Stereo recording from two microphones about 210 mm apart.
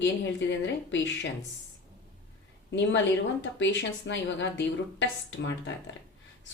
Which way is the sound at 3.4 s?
60° left (ahead or behind).